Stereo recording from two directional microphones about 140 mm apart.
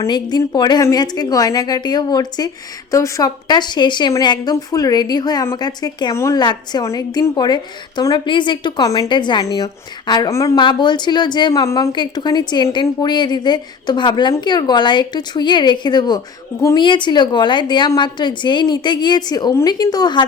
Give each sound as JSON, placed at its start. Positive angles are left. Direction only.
{"t": 0.0, "sound": "a woman's voice", "side_deg": 30}